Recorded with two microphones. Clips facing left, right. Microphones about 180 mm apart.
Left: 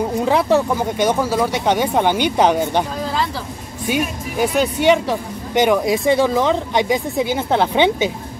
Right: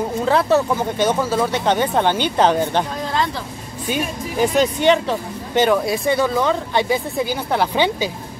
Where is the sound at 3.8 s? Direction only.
10° left (ahead or behind).